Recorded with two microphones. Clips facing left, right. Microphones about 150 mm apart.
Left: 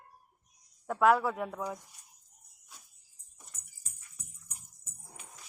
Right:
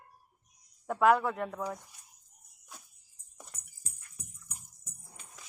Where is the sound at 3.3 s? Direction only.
60° right (ahead or behind).